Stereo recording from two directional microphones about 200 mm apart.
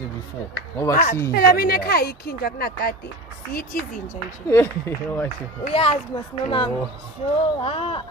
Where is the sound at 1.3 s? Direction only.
50° left (ahead or behind).